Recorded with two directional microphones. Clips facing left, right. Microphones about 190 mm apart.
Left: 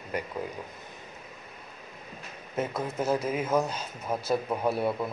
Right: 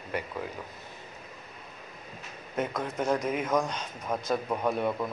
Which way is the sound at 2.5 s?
5° left (ahead or behind).